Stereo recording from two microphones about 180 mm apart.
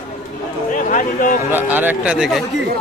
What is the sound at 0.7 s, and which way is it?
Speech, 45° left (ahead or behind).